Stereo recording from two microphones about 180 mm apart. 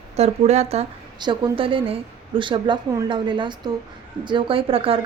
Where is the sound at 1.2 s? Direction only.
25° right (ahead or behind).